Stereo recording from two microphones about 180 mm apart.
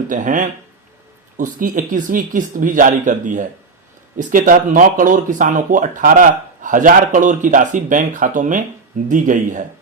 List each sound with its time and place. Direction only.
0.1 s speech: 45° right (ahead or behind)